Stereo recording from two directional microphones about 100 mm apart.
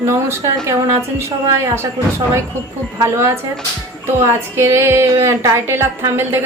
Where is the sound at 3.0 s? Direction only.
35° right (ahead or behind).